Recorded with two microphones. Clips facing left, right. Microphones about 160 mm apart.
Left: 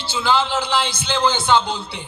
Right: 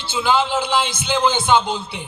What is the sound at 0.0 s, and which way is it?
A man's voice, 20° right (ahead or behind).